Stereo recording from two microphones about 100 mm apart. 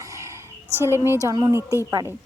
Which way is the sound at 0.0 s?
30° right (ahead or behind).